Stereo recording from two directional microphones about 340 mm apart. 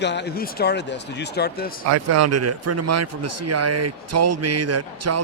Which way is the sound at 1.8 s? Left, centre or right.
Right.